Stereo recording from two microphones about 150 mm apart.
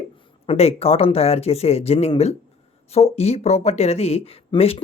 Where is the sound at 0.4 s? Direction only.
40° left (ahead or behind).